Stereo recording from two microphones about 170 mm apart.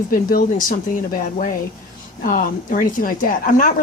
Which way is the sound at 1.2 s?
50° left (ahead or behind).